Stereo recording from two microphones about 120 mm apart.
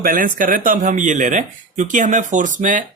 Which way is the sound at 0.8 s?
90° right.